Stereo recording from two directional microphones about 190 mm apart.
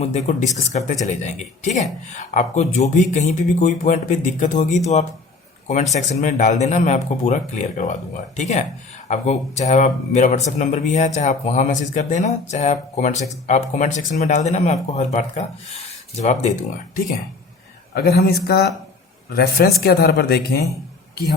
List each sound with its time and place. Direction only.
0.0 s speech: 40° left (ahead or behind)
17.9 s speech: 55° left (ahead or behind)